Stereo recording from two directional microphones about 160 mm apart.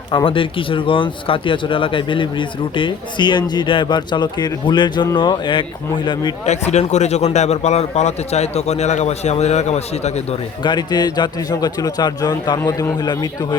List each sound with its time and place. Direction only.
0.3 s speech: 35° left (ahead or behind)
6.4 s a man's voice: 45° left (ahead or behind)
10.6 s speech: 25° left (ahead or behind)